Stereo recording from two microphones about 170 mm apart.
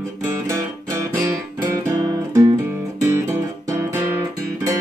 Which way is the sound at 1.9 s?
20° right (ahead or behind).